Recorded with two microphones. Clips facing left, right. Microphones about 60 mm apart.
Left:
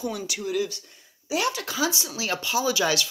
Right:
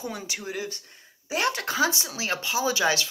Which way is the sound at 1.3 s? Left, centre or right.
Right.